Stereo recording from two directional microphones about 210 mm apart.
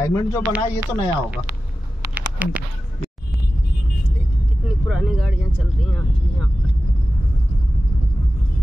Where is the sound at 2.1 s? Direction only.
5° right (ahead or behind).